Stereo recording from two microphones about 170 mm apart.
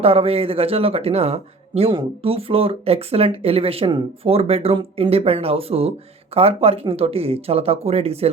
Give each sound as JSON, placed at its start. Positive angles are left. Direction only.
{"t": 0.0, "sound": "speech", "side_deg": -35}